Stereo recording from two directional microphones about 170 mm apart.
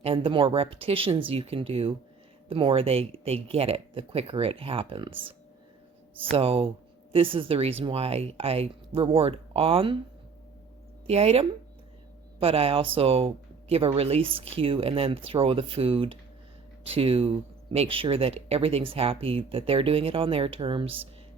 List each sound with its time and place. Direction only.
0.0 s speech: 30° right (ahead or behind)
11.0 s speech: 35° right (ahead or behind)